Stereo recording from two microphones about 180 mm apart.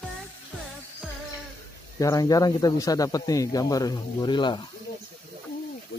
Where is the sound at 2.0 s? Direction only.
20° left (ahead or behind).